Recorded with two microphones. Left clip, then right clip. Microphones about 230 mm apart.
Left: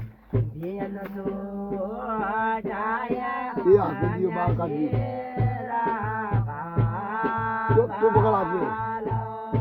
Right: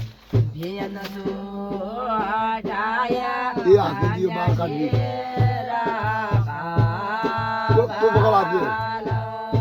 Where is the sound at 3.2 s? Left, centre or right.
Right.